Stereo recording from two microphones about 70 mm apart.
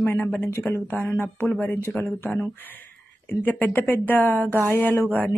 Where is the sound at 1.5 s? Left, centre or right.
Left.